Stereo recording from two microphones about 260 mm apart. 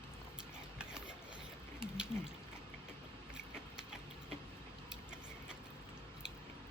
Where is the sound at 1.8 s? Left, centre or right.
Centre.